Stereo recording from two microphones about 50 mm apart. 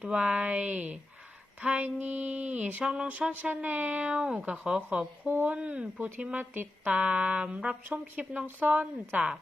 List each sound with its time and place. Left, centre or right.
0.0 s speech: right
1.6 s a sound: right
2.8 s speech: centre
3.5 s speech: right
4.2 s speech: centre
5.3 s a sound: right
5.5 s speech: right
6.3 s speech: right; by 7.8 s centre
7.9 s speech: right